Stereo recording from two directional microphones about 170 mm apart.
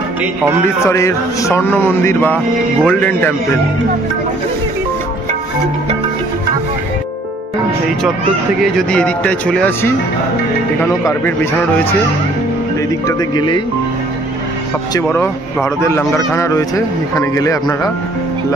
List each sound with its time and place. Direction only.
0.8 s speech: 15° left (ahead or behind)
8.7 s speech: 5° left (ahead or behind)
13.0 s speech: 25° left (ahead or behind)
15.0 s speech: 15° left (ahead or behind)